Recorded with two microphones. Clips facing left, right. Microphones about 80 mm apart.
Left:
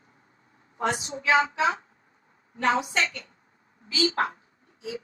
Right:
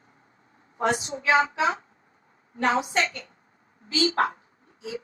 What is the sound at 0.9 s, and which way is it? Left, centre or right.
Speech, right.